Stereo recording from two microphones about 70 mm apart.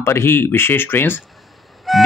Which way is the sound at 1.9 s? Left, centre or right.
Centre.